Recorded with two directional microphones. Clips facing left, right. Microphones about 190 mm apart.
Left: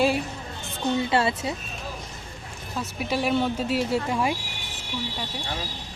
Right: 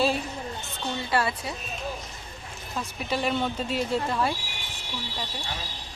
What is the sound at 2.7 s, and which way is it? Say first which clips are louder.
Speech: left 2 dB; 10° left (ahead or behind).